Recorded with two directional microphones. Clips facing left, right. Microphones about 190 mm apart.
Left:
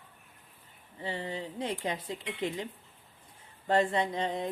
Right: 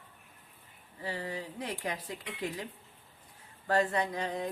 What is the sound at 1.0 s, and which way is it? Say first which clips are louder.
Speech: left 1 dB; 25° left (ahead or behind).